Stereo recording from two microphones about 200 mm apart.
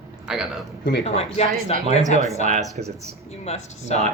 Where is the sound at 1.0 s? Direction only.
30° left (ahead or behind).